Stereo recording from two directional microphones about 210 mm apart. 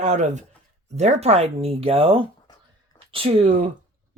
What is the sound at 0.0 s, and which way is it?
Speech, 35° right (ahead or behind).